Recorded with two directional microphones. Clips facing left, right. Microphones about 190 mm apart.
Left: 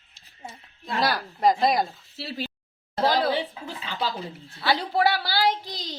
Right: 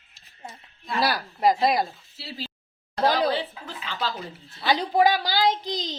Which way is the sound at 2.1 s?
55° left (ahead or behind).